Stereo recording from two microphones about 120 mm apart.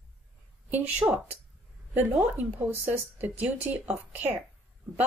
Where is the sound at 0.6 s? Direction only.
15° right (ahead or behind).